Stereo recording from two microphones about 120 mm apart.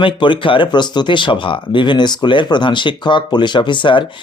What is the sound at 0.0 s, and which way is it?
Speech, 45° left (ahead or behind).